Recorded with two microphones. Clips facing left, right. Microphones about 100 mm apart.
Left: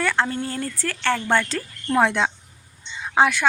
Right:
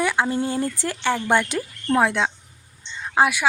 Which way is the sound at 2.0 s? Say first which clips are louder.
Left 1 dB; centre (ahead or behind).